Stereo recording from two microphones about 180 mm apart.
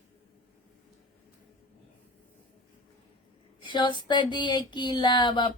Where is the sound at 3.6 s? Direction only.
25° left (ahead or behind).